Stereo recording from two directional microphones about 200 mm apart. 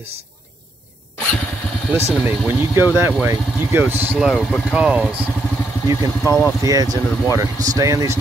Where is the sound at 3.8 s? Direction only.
10° right (ahead or behind).